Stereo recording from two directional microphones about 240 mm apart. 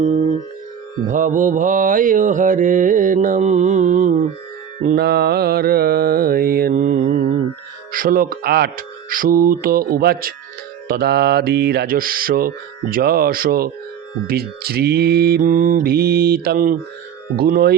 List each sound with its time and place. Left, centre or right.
0.0 s music: right
1.0 s mantra: right